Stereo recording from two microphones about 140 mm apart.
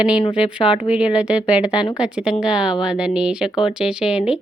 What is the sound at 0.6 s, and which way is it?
Speech, 45° left (ahead or behind).